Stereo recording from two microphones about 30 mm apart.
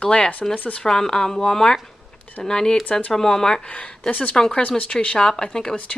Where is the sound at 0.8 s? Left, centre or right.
Left.